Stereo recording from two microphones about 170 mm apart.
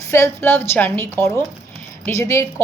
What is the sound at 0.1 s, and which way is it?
Speech, 15° left (ahead or behind).